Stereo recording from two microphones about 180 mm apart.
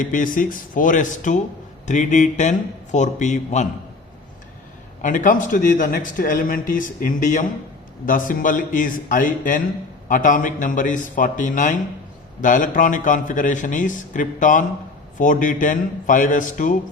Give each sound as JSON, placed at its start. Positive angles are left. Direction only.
{"t": 0.0, "sound": "a man's voice", "side_deg": 50}
{"t": 5.0, "sound": "a man's voice", "side_deg": 45}